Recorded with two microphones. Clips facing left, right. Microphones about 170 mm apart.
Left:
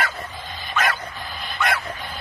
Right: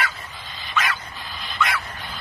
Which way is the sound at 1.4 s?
50° left (ahead or behind).